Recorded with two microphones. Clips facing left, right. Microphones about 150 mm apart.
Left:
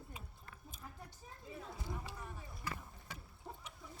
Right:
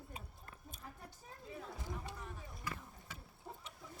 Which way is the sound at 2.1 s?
5° left (ahead or behind).